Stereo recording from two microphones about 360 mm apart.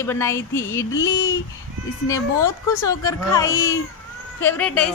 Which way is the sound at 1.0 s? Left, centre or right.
Left.